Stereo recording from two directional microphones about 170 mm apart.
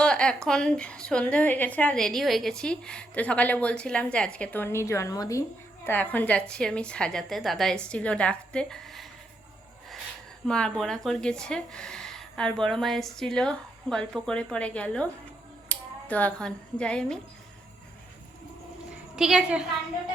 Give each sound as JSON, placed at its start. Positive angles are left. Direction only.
{"t": 0.0, "sound": "a woman's voice", "side_deg": 5}
{"t": 10.4, "sound": "speech", "side_deg": 5}
{"t": 19.1, "sound": "speech", "side_deg": -5}